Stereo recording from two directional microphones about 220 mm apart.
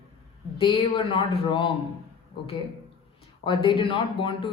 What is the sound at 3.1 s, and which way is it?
Speech, 20° left (ahead or behind).